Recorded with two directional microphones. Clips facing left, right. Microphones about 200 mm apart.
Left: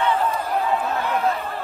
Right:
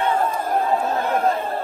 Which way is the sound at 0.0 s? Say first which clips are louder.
Right 1 dB; 50° right (ahead or behind).